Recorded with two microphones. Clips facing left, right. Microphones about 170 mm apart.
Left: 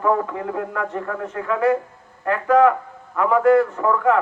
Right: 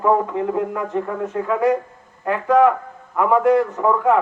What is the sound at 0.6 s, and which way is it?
A man's voice, 15° right (ahead or behind).